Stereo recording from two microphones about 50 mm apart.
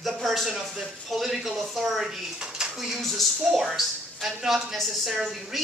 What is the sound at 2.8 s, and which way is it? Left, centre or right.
Speech, centre.